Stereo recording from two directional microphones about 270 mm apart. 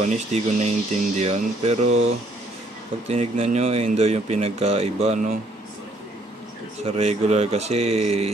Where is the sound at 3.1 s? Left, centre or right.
Right.